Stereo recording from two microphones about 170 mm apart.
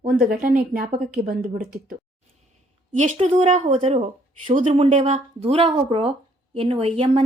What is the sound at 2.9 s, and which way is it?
Speech, 45° right (ahead or behind).